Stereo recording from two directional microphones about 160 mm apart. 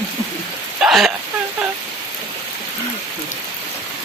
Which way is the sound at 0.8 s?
Centre (ahead or behind).